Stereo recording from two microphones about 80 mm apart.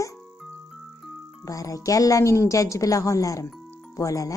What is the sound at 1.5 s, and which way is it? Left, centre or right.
A woman's voice, left.